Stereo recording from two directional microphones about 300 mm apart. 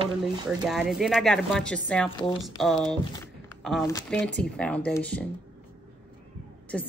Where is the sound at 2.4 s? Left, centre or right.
Centre.